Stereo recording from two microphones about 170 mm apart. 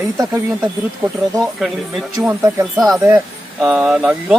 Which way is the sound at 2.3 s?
15° right (ahead or behind).